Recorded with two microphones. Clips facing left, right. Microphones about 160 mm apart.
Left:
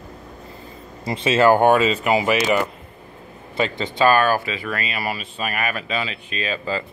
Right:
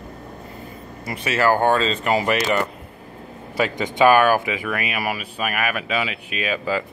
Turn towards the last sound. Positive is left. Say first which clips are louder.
# right 2 dB
turn(degrees=-10)  # may be behind; listen again after turning